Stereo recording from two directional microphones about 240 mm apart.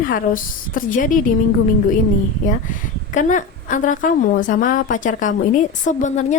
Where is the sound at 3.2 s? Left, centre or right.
Left.